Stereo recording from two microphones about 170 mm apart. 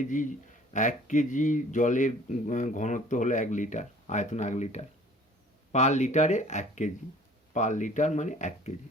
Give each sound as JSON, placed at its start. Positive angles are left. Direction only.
{"t": 0.0, "sound": "speech", "side_deg": 50}